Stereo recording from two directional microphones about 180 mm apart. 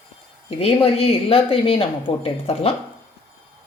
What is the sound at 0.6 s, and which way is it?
A woman's voice, 35° left (ahead or behind).